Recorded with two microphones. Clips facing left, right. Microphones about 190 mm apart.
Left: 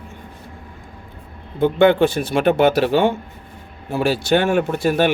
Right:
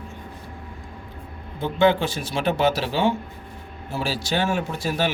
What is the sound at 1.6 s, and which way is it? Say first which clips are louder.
Speech: left 6 dB; 60° left (ahead or behind).